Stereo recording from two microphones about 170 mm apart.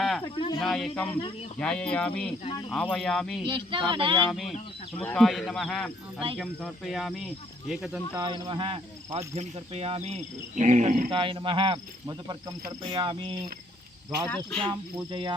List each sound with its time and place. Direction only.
0.6 s speech: 5° left (ahead or behind)
2.4 s speech: 30° left (ahead or behind)
2.6 s speech: 5° left (ahead or behind)
3.4 s speech: 30° right (ahead or behind)
4.3 s speech: centre (ahead or behind)
8.2 s speech: 25° right (ahead or behind)
9.1 s cricket: 40° right (ahead or behind)
11.1 s speech: 30° right (ahead or behind)
14.3 s speech: 10° left (ahead or behind)
14.7 s speech: 25° right (ahead or behind)